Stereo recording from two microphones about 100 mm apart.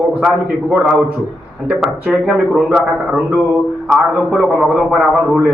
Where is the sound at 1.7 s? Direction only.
15° right (ahead or behind).